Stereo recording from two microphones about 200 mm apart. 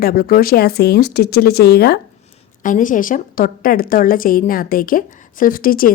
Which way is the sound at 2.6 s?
40° left (ahead or behind).